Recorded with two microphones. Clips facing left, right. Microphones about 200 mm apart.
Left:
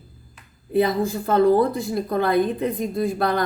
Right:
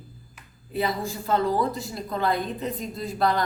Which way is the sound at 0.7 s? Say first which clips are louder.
Left 8 dB; 55° left (ahead or behind).